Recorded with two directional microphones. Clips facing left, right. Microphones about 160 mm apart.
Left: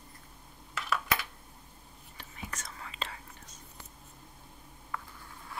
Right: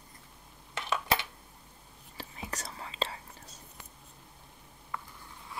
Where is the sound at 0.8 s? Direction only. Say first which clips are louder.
Right 2 dB; 30° right (ahead or behind).